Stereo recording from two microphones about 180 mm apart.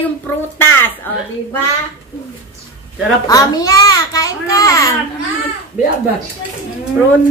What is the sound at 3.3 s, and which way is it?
A child's voice, 20° left (ahead or behind).